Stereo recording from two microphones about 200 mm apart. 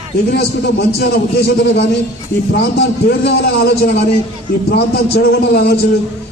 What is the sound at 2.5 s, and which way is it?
A man's voice, 55° left (ahead or behind).